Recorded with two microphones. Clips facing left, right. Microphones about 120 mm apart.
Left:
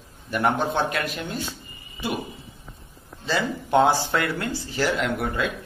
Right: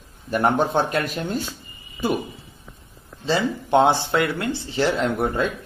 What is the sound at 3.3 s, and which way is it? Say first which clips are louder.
Speech: right 3 dB; 25° right (ahead or behind).